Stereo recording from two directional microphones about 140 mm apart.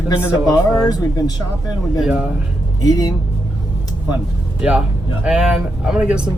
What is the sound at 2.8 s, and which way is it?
Speech, 25° left (ahead or behind).